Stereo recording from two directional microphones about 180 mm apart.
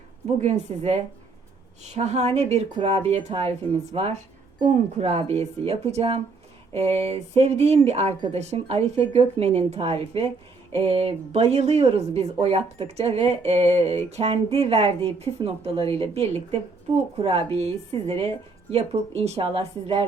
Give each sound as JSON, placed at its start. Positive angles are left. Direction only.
{"t": 0.4, "sound": "speech", "side_deg": -35}